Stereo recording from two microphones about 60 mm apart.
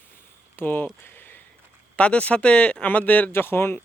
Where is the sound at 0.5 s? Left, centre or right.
Left.